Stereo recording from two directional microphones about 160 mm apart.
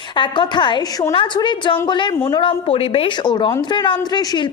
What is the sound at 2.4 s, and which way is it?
A woman's voice, 35° left (ahead or behind).